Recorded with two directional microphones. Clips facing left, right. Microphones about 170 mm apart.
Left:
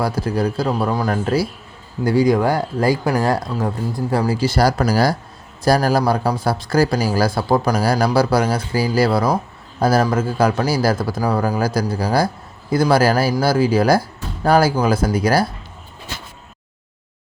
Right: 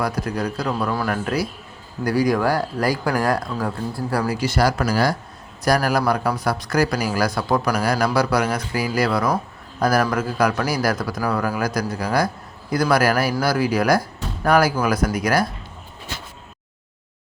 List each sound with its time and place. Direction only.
0.0 s speech: 30° left (ahead or behind)